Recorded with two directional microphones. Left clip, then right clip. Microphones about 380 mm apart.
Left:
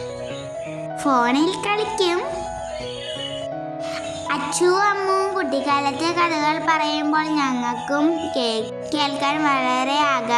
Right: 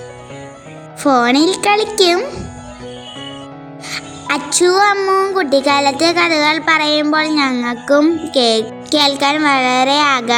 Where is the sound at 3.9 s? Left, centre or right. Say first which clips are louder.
Right 7 dB; centre.